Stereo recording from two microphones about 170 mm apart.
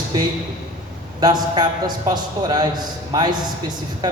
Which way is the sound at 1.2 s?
25° right (ahead or behind).